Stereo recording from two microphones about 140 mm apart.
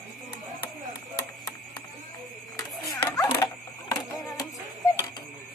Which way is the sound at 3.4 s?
25° left (ahead or behind).